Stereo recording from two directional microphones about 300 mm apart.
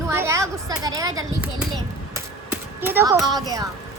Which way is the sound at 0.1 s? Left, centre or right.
Centre.